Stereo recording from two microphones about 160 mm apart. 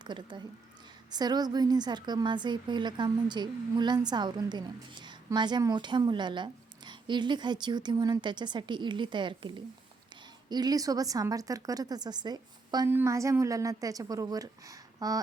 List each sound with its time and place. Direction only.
0.0 s a woman's voice: 30° right (ahead or behind)